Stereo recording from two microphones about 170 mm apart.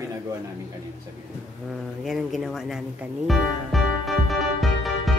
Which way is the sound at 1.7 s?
Centre (ahead or behind).